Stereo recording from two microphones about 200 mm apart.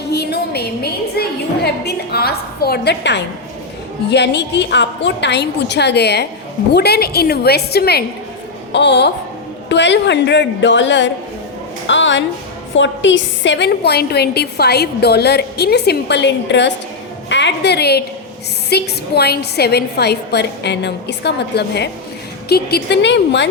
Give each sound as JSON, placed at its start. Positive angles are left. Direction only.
{"t": 0.1, "sound": "music", "side_deg": 55}
{"t": 4.1, "sound": "a woman's voice", "side_deg": 60}